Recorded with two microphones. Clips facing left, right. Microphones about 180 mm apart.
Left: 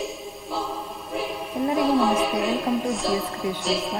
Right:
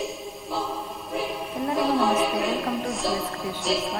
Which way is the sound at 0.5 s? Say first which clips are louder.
Even; centre (ahead or behind).